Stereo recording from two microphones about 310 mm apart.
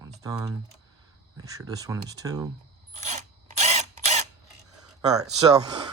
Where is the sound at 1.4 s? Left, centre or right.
Centre.